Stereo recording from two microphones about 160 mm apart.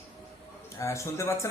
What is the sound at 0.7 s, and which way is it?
Speech, 20° left (ahead or behind).